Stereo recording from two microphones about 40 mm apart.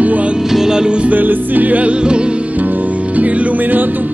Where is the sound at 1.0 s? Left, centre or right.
Right.